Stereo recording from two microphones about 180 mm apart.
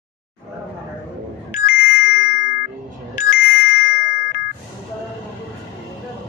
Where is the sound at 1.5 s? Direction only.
45° left (ahead or behind).